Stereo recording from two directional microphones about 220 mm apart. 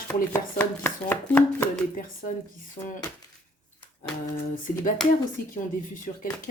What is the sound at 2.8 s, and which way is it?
Speech, 20° left (ahead or behind).